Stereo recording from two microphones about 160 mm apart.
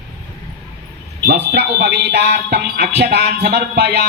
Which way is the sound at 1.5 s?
90° right.